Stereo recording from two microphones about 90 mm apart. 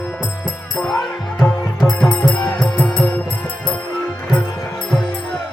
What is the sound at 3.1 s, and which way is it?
Music, 15° left (ahead or behind).